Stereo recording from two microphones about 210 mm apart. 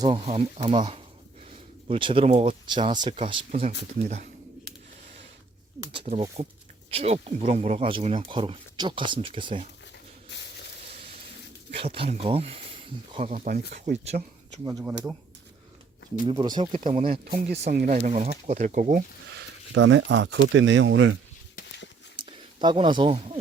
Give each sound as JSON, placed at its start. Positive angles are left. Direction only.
{"t": 0.0, "sound": "speech", "side_deg": -25}
{"t": 5.9, "sound": "speech", "side_deg": -30}
{"t": 11.7, "sound": "speech", "side_deg": -25}
{"t": 14.6, "sound": "speech", "side_deg": -15}
{"t": 16.2, "sound": "speech", "side_deg": -20}
{"t": 16.7, "sound": "speech", "side_deg": -40}
{"t": 22.2, "sound": "speech", "side_deg": -25}